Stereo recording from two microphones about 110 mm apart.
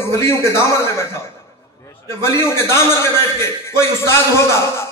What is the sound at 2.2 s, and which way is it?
A man's voice, 25° left (ahead or behind).